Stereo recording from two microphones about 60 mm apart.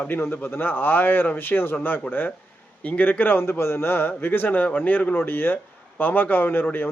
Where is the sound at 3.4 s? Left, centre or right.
Left.